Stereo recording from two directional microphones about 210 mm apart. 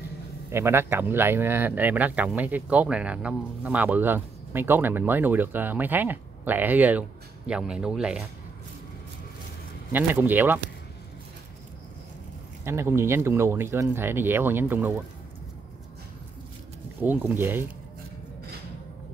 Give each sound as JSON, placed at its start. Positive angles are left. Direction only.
{"t": 0.5, "sound": "speech", "side_deg": -10}
{"t": 9.9, "sound": "speech", "side_deg": -10}
{"t": 12.6, "sound": "speech", "side_deg": -10}
{"t": 17.0, "sound": "speech", "side_deg": -10}